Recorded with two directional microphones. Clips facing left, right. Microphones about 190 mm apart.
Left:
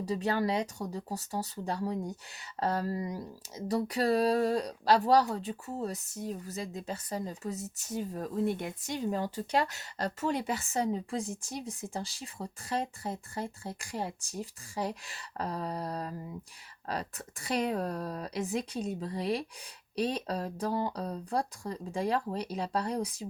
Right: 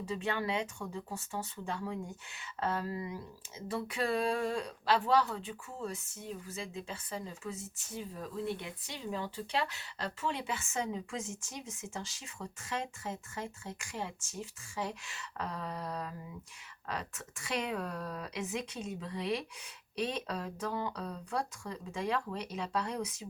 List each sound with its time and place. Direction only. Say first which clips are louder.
0.0 s speech: left 5 dB; 40° left (ahead or behind)